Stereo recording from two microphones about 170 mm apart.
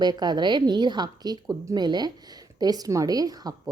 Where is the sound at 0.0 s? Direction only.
25° right (ahead or behind).